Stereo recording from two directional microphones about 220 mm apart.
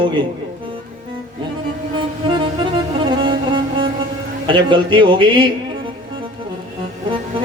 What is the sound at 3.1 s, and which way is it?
Music, 20° right (ahead or behind).